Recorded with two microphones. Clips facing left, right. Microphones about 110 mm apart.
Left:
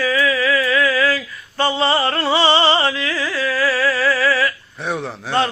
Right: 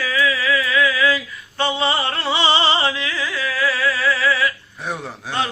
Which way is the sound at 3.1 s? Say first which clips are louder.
Left 3 dB; 40° left (ahead or behind).